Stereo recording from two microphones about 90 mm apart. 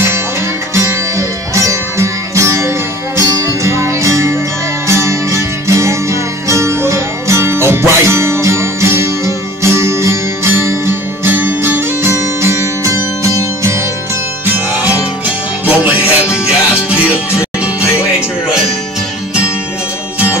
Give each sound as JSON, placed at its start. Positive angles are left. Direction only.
{"t": 0.7, "sound": "music", "side_deg": -35}
{"t": 14.4, "sound": "music", "side_deg": -15}